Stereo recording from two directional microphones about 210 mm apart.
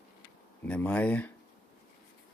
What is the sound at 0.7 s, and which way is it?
Speech, 5° left (ahead or behind).